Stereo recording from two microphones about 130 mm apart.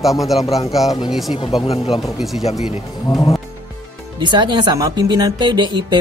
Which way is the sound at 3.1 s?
30° left (ahead or behind).